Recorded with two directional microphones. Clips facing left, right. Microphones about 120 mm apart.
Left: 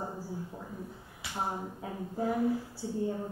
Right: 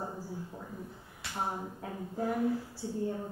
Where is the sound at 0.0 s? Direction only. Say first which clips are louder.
Left 1 dB; 5° left (ahead or behind).